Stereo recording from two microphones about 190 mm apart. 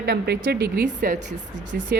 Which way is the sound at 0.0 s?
55° right (ahead or behind).